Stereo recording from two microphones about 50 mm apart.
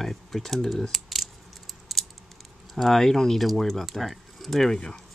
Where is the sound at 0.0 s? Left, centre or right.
Centre.